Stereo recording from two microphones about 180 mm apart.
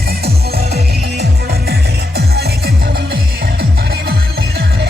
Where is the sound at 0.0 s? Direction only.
60° right (ahead or behind).